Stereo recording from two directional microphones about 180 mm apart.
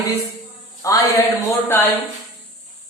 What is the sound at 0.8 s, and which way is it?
A man's voice, 20° left (ahead or behind).